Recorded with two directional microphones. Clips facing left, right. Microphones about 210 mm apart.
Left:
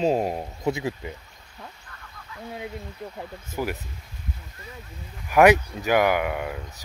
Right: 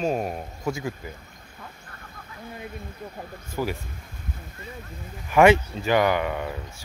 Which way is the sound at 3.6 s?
10° left (ahead or behind).